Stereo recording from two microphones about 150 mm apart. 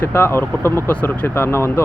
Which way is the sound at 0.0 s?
15° left (ahead or behind).